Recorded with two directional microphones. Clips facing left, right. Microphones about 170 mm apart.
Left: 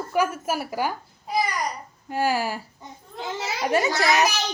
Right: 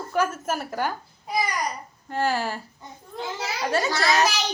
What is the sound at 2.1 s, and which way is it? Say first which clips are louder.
A woman's voice: left 1 dB; 10° left (ahead or behind).